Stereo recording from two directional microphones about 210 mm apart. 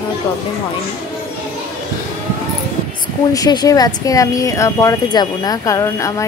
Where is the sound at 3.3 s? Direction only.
20° left (ahead or behind).